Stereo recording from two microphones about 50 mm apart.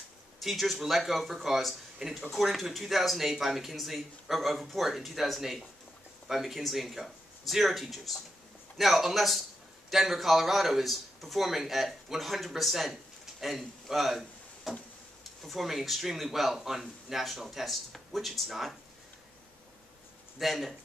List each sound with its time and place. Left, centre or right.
0.4 s speech: centre
20.3 s speech: centre